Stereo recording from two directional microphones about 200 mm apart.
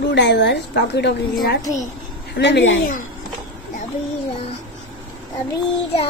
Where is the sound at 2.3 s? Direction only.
60° left (ahead or behind).